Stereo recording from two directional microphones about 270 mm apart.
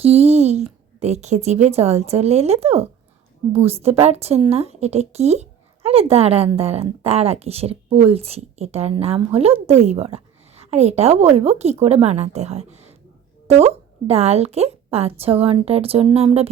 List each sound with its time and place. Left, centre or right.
0.0 s speech: right
14.1 s speech: right